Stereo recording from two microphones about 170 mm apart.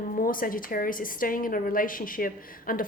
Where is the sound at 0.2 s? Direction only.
55° left (ahead or behind).